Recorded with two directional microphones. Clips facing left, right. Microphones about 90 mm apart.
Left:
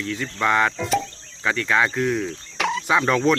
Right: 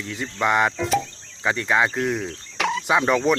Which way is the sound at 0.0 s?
15° right (ahead or behind).